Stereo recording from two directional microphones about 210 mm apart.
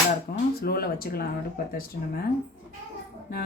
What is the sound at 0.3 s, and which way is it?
Speech, 45° left (ahead or behind).